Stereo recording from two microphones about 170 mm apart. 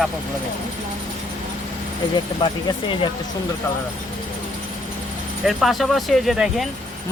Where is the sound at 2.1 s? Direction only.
25° left (ahead or behind).